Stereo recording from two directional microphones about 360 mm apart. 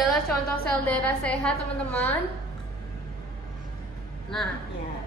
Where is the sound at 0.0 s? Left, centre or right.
Centre.